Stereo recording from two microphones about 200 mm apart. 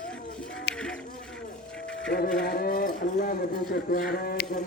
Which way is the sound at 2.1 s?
55° left (ahead or behind).